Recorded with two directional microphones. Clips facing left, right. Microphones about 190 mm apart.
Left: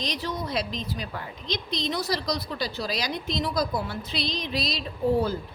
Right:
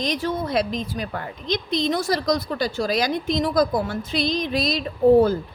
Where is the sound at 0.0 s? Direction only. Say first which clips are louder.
Right 6 dB; 50° right (ahead or behind).